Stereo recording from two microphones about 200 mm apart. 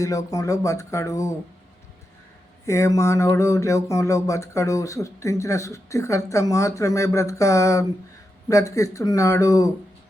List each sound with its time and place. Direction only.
0.0 s speech: 15° left (ahead or behind)
2.6 s speech: 15° left (ahead or behind)